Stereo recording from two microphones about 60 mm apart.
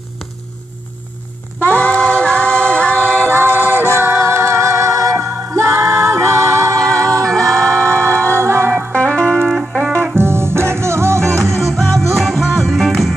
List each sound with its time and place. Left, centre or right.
1.6 s a capella: left
3.3 s music: right
7.8 s music: right
8.9 s music: centre
10.1 s music: right
11.4 s music: centre